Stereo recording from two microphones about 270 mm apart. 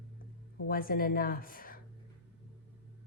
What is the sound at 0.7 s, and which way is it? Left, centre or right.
Speech, left.